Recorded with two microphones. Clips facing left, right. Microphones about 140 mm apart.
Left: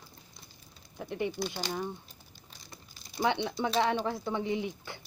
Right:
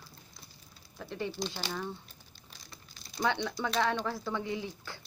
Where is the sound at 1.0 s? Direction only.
15° left (ahead or behind).